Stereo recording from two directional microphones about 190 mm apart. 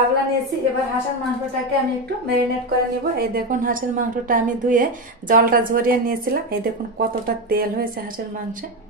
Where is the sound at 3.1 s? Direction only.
50° right (ahead or behind).